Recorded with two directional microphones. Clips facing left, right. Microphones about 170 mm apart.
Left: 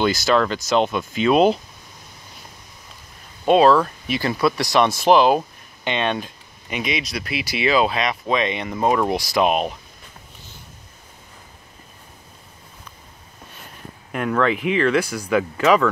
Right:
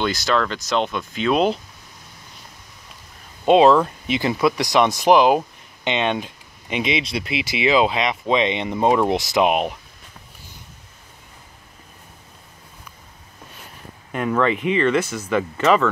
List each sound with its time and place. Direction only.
0.0 s speech: 5° left (ahead or behind)
3.4 s speech: 20° right (ahead or behind)
14.1 s speech: centre (ahead or behind)